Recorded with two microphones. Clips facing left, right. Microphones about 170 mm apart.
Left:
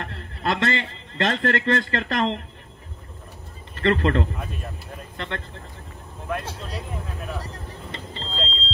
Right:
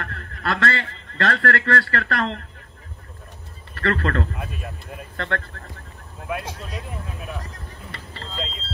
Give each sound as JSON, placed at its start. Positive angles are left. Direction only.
{"t": 0.0, "sound": "a man's voice", "side_deg": 20}
{"t": 3.7, "sound": "speech", "side_deg": 20}
{"t": 6.2, "sound": "speech", "side_deg": -5}
{"t": 7.9, "sound": "vehicle", "side_deg": 20}
{"t": 8.4, "sound": "a sound", "side_deg": -15}